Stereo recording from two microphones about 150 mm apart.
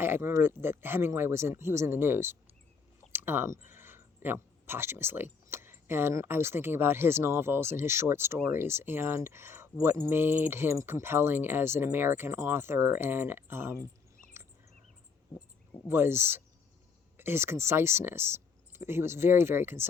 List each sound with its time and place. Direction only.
0.0 s speech: 15° right (ahead or behind)
15.4 s cricket: 20° left (ahead or behind)
15.9 s speech: 15° right (ahead or behind)